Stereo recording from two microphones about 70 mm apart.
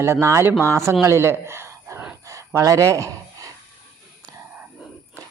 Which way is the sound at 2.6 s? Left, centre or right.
Right.